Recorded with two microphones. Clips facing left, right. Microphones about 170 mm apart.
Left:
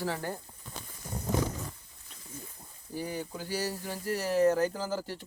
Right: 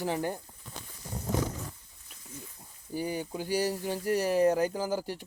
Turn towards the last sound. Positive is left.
turn(degrees=-15)  # may be behind; listen again after turning